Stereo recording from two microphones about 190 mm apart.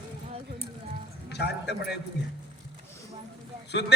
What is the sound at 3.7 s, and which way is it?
Speech, 65° left (ahead or behind).